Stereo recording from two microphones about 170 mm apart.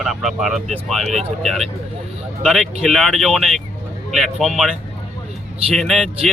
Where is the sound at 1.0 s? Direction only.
40° right (ahead or behind).